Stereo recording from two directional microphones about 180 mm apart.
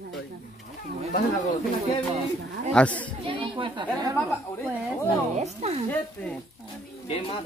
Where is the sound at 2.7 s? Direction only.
5° left (ahead or behind).